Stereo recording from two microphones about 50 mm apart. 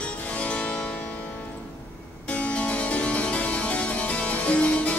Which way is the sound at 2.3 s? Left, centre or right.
Left.